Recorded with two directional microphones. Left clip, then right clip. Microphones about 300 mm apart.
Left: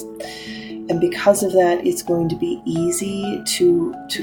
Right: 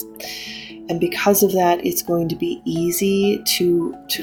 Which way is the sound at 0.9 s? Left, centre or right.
Right.